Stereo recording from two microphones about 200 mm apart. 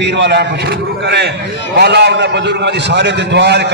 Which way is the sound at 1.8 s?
55° right (ahead or behind).